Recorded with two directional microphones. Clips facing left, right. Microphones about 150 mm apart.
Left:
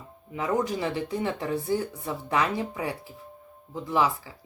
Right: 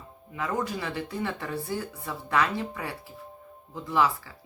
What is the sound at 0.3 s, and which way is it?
Speech, 20° left (ahead or behind).